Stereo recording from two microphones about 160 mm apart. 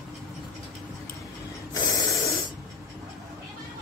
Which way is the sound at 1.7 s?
25° left (ahead or behind).